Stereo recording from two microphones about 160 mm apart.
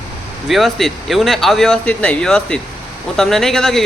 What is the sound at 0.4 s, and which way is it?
Speech, centre (ahead or behind).